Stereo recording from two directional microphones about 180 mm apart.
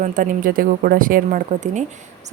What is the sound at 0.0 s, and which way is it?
Speech, 50° right (ahead or behind).